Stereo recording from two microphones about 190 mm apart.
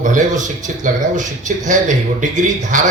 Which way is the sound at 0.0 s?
40° right (ahead or behind).